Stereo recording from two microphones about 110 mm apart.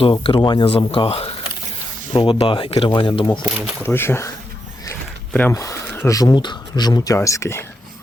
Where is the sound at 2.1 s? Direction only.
50° left (ahead or behind).